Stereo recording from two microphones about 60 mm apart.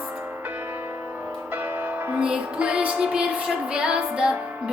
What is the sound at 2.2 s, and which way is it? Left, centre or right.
Music, centre.